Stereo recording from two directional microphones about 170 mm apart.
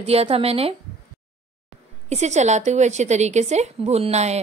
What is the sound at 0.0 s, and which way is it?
Speech, 35° right (ahead or behind).